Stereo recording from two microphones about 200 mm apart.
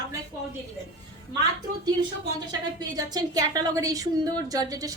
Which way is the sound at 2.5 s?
20° right (ahead or behind).